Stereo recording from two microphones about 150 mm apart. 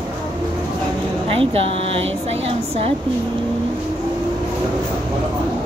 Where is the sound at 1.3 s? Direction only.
40° right (ahead or behind).